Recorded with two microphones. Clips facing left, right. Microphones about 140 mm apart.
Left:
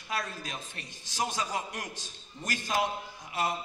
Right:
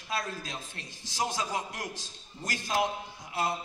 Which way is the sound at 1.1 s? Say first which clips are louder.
Right 1 dB; 15° right (ahead or behind).